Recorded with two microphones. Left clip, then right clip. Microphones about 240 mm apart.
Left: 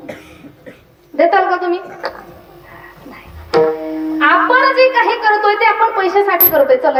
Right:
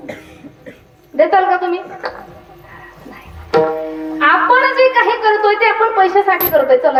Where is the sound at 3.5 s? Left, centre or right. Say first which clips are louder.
Left 1 dB; left.